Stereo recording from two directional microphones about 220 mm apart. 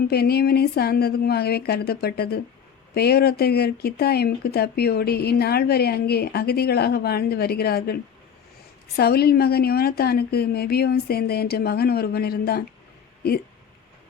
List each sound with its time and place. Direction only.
0.1 s speech: 45° left (ahead or behind)
9.0 s speech: 45° left (ahead or behind)